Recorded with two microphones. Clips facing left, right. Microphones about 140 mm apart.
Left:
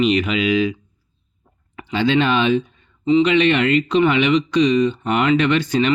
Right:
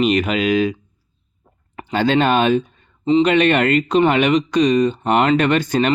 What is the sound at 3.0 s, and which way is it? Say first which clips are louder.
Speech: even; 35° right (ahead or behind).